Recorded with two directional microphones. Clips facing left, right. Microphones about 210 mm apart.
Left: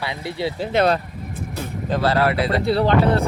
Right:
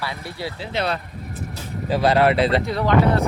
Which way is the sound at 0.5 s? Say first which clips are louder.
Left 7 dB; 45° left (ahead or behind).